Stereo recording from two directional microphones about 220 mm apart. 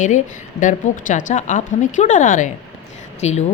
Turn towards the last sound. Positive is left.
turn(degrees=30)  # may be behind; listen again after turning